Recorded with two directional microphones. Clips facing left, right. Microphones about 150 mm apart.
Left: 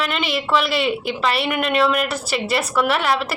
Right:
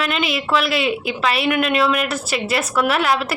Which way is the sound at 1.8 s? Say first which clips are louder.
Even; centre (ahead or behind).